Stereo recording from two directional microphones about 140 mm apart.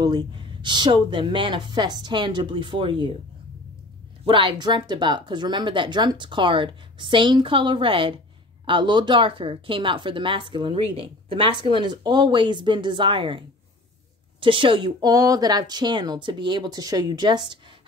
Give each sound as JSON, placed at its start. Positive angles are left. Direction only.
{"t": 0.0, "sound": "speech", "side_deg": -35}
{"t": 4.2, "sound": "speech", "side_deg": -40}
{"t": 14.4, "sound": "speech", "side_deg": -35}